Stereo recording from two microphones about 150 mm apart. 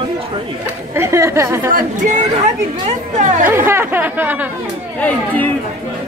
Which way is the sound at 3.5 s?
15° right (ahead or behind).